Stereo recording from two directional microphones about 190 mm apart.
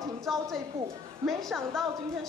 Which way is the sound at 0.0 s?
Centre (ahead or behind).